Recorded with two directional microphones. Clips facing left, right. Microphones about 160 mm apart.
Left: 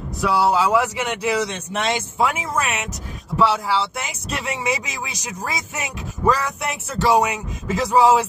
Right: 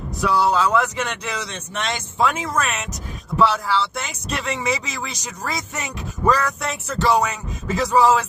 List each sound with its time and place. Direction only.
0.2 s speech: 5° left (ahead or behind)